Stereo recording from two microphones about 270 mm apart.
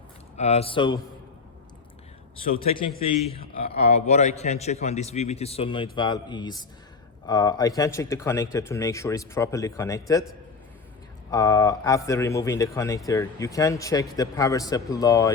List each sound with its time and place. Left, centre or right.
0.3 s a man's voice: left
2.6 s a man's voice: centre
11.3 s a man's voice: centre